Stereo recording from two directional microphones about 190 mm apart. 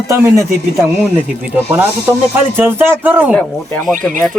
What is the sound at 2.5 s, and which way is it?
Speech, 10° right (ahead or behind).